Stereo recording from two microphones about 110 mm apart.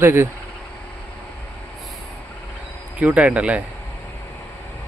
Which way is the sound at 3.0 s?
10° right (ahead or behind).